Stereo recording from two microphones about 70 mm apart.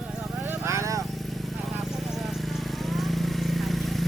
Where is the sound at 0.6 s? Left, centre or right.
Right.